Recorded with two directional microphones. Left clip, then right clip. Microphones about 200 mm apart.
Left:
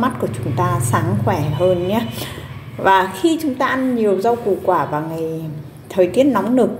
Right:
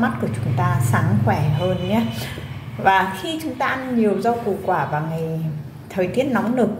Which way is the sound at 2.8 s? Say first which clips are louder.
Left 3 dB; 35° left (ahead or behind).